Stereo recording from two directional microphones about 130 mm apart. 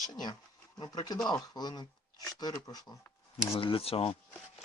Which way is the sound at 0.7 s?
30° left (ahead or behind).